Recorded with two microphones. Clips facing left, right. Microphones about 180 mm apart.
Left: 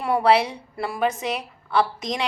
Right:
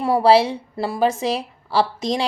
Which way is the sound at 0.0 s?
30° right (ahead or behind).